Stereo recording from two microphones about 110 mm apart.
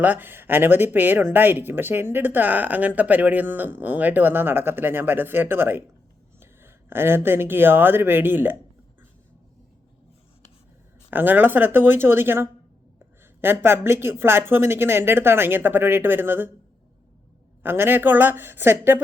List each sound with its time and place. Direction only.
0.0 s speech: 15° right (ahead or behind)
11.1 s speech: 15° right (ahead or behind)
17.6 s speech: 20° right (ahead or behind)